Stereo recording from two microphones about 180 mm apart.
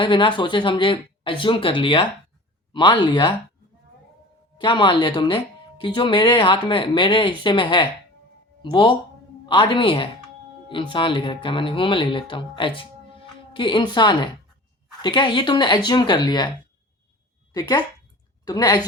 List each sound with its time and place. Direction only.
0.0 s speech: 25° left (ahead or behind)
4.5 s speech: 25° left (ahead or behind)
17.5 s speech: 20° left (ahead or behind)